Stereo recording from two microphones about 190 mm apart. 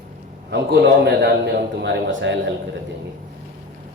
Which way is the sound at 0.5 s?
60° right (ahead or behind).